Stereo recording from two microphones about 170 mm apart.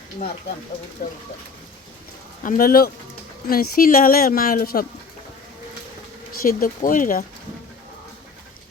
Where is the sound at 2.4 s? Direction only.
55° left (ahead or behind).